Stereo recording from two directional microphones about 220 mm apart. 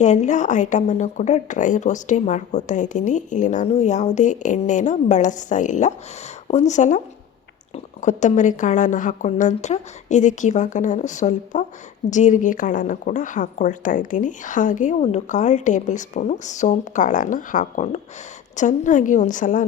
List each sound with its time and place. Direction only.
0.0 s speech: 30° left (ahead or behind)
8.0 s speech: 35° left (ahead or behind)